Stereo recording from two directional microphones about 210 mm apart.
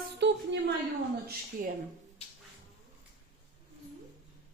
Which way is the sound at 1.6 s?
45° right (ahead or behind).